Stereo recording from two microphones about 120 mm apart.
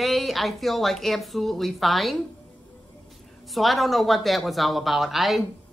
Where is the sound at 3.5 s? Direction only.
Centre (ahead or behind).